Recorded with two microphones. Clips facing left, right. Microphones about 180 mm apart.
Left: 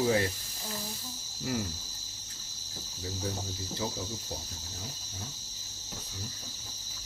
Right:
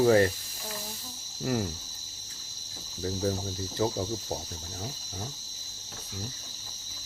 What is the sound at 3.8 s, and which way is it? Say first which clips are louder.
Speech: right 8 dB; 45° right (ahead or behind).